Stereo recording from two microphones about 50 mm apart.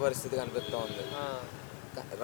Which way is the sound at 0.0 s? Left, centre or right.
Centre.